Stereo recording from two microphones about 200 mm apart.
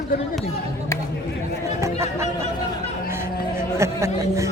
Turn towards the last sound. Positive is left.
turn(degrees=-15)  # may be behind; listen again after turning